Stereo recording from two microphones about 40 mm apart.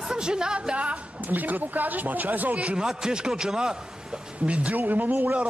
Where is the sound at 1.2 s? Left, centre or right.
Right.